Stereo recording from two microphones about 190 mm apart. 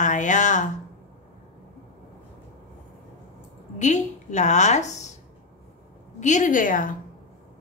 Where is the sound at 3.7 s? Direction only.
40° left (ahead or behind).